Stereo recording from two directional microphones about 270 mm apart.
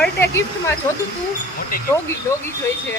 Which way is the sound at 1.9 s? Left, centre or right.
Centre.